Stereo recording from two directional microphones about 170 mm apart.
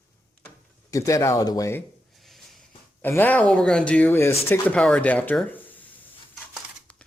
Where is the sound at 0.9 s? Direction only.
20° left (ahead or behind).